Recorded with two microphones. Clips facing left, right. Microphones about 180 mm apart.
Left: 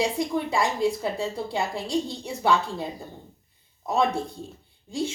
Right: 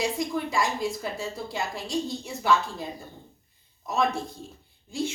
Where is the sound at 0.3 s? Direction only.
30° left (ahead or behind).